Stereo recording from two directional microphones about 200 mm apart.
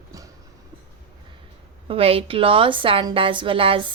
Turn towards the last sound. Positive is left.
turn(degrees=-25)  # may be behind; listen again after turning